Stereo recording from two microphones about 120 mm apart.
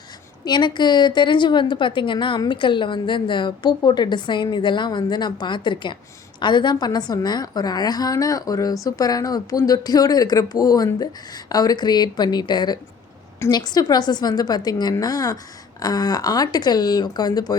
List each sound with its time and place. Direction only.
0.4 s a woman's voice: 40° left (ahead or behind)